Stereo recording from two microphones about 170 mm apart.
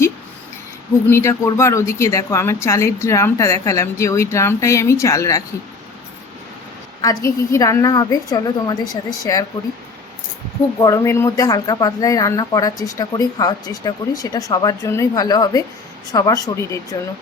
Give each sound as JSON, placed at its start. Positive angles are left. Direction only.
{"t": 1.1, "sound": "a woman's voice", "side_deg": 15}
{"t": 7.5, "sound": "speech", "side_deg": 20}
{"t": 10.8, "sound": "speech", "side_deg": 20}